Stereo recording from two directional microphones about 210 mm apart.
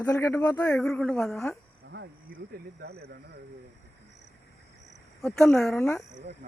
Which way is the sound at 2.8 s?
50° right (ahead or behind).